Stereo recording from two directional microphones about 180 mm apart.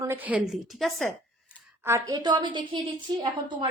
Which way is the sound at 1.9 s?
15° right (ahead or behind).